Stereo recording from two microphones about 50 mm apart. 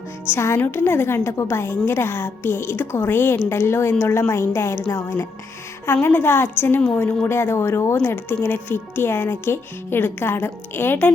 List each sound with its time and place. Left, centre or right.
0.3 s a woman's voice: left
5.8 s speech: left
6.6 s a woman's voice: left
7.3 s a woman's voice: left
8.0 s speech: left